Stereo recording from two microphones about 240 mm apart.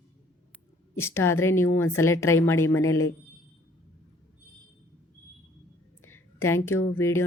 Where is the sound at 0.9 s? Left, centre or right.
Centre.